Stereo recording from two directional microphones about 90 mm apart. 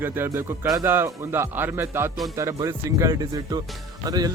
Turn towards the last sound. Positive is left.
turn(degrees=-45)  # may be behind; listen again after turning